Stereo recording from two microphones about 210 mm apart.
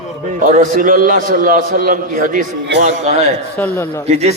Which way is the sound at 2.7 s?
55° right (ahead or behind).